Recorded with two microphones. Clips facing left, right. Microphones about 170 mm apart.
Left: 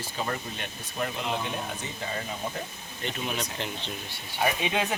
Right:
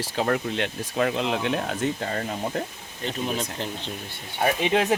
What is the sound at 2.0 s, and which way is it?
Speech, 55° right (ahead or behind).